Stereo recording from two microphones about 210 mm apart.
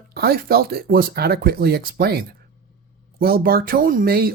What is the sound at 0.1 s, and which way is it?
Speech, 45° right (ahead or behind).